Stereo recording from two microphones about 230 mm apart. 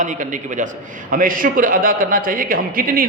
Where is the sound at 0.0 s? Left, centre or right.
Right.